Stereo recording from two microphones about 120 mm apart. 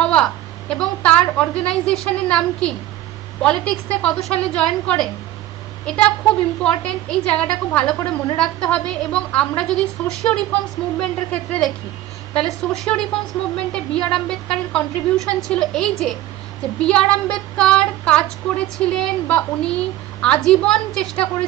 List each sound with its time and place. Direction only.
0.0 s a woman's voice: 5° left (ahead or behind)
1.3 s child singing: 10° left (ahead or behind)
4.0 s a woman's voice: 5° left (ahead or behind)
5.9 s child singing: 5° left (ahead or behind)
6.8 s a woman's voice: 5° left (ahead or behind)
11.0 s child singing: 5° left (ahead or behind)
12.4 s a woman's voice: centre (ahead or behind)
16.8 s child singing: 10° left (ahead or behind)